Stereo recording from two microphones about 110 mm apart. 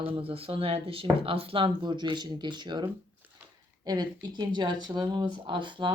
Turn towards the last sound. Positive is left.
turn(degrees=-45)  # may be behind; listen again after turning